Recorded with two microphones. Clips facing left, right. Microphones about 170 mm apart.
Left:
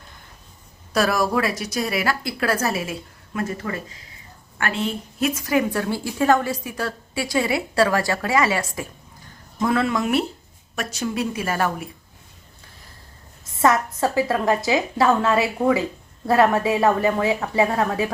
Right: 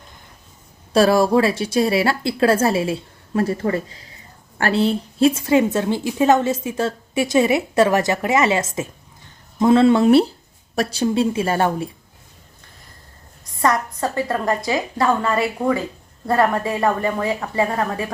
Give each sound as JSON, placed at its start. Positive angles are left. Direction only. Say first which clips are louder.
{"t": 0.9, "sound": "a woman's voice", "louder": "right 6 dB", "side_deg": -30}
{"t": 13.4, "sound": "a woman's voice", "louder": "left 1 dB", "side_deg": 5}